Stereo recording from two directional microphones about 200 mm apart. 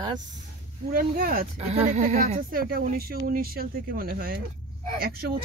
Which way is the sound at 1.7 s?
35° right (ahead or behind).